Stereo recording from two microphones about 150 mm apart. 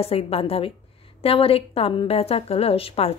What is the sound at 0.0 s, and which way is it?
A woman's voice, 40° left (ahead or behind).